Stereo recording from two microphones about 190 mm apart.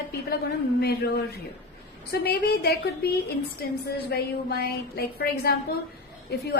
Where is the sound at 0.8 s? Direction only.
55° left (ahead or behind).